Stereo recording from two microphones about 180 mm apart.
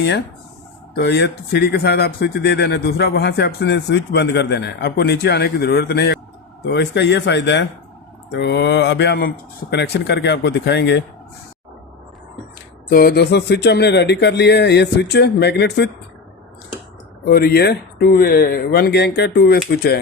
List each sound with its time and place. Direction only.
0.9 s speech: 65° left (ahead or behind)
12.9 s speech: 55° left (ahead or behind)
17.2 s speech: 60° left (ahead or behind)